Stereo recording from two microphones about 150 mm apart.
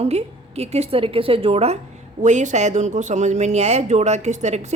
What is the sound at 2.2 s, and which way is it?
Speech, 50° right (ahead or behind).